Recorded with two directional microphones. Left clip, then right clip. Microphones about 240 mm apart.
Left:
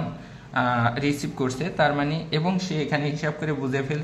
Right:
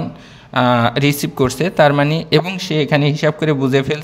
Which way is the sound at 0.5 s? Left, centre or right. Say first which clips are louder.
Right 9 dB; right.